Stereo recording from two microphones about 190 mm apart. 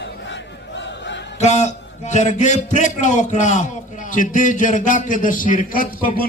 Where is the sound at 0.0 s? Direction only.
70° left (ahead or behind).